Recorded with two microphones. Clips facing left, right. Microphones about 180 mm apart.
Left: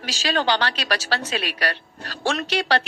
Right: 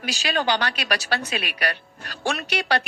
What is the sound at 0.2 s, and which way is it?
Speech, 35° left (ahead or behind).